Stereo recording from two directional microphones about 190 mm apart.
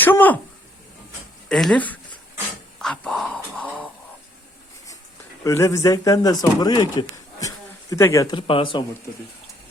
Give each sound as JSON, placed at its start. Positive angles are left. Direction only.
{"t": 0.0, "sound": "speech", "side_deg": 10}
{"t": 1.5, "sound": "speech", "side_deg": 5}
{"t": 2.7, "sound": "a sound", "side_deg": 5}
{"t": 5.4, "sound": "speech", "side_deg": 15}